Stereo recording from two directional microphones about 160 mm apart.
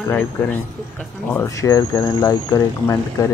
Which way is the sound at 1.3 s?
20° left (ahead or behind).